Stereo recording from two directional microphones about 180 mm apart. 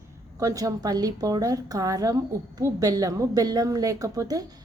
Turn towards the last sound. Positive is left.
turn(degrees=-20)  # may be behind; listen again after turning